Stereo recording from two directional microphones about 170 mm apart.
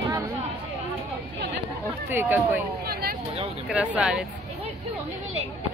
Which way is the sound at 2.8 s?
60° right (ahead or behind).